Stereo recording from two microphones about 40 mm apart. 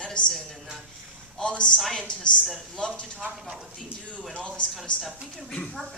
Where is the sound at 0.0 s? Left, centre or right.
Left.